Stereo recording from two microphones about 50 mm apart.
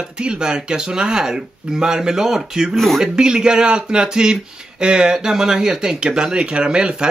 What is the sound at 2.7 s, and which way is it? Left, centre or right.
Speech, centre.